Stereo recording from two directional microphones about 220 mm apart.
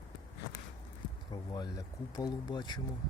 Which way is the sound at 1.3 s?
20° left (ahead or behind).